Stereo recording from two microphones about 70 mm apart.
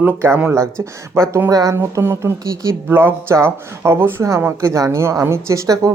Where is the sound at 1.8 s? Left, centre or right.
Right.